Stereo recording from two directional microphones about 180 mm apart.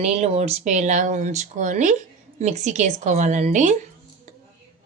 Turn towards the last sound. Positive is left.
turn(degrees=-40)  # may be behind; listen again after turning